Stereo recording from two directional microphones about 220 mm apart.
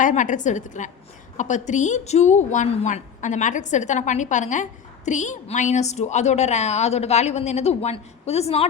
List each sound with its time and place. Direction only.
0.0 s a woman's voice: 35° left (ahead or behind)